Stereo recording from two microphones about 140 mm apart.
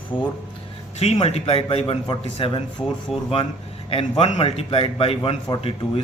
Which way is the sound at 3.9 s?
45° left (ahead or behind).